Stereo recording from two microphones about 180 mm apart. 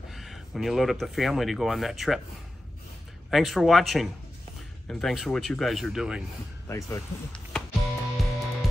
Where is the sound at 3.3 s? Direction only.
Centre (ahead or behind).